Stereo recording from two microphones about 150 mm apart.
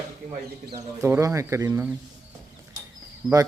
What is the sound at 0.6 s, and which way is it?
Speech, 20° right (ahead or behind).